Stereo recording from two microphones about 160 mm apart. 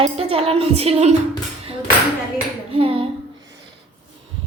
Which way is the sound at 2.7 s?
35° right (ahead or behind).